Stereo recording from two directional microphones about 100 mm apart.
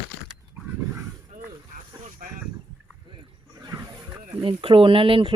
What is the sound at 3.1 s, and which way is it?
Wild animals, 45° right (ahead or behind).